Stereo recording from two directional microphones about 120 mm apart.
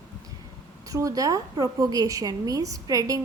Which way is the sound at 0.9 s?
30° right (ahead or behind).